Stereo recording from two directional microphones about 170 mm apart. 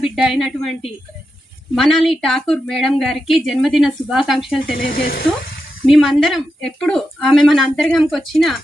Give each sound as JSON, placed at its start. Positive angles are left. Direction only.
{"t": 0.0, "sound": "speech", "side_deg": 0}
{"t": 1.7, "sound": "speech", "side_deg": 0}
{"t": 4.8, "sound": "speech", "side_deg": 60}
{"t": 5.8, "sound": "speech", "side_deg": 0}